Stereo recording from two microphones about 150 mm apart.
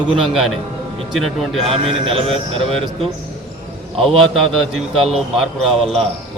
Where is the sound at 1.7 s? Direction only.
40° right (ahead or behind).